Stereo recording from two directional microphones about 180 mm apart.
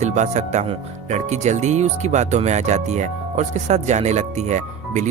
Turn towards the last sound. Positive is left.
turn(degrees=-40)  # may be behind; listen again after turning